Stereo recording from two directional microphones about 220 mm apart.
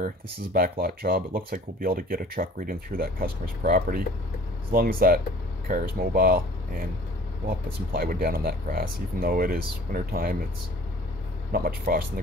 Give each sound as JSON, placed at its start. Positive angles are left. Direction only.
{"t": 0.0, "sound": "speech", "side_deg": -40}
{"t": 11.5, "sound": "speech", "side_deg": -40}